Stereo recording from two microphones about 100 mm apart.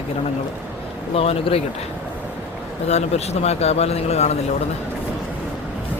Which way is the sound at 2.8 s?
90° left.